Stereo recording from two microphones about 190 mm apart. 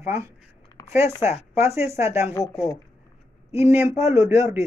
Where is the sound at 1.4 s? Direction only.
15° right (ahead or behind).